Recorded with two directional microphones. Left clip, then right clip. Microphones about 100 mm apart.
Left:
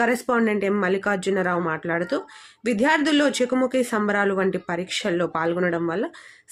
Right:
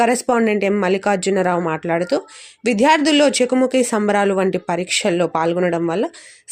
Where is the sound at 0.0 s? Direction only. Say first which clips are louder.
Right 5 dB; 40° right (ahead or behind).